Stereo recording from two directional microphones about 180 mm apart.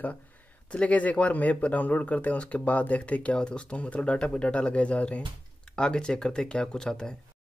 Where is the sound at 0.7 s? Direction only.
5° left (ahead or behind).